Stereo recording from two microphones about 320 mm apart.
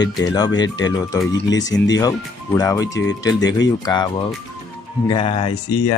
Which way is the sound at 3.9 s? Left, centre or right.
Centre.